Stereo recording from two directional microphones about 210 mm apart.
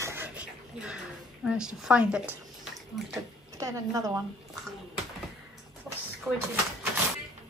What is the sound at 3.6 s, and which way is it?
Speech, 15° right (ahead or behind).